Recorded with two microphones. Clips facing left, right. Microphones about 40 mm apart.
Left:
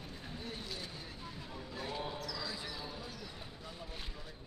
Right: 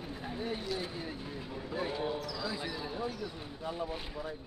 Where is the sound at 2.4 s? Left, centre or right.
Right.